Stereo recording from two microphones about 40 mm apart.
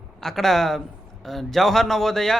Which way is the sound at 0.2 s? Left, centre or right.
Centre.